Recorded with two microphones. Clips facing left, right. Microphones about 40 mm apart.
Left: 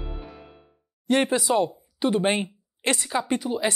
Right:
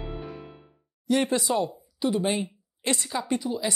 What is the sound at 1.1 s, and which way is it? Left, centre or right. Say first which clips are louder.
Speech: left 3 dB; left.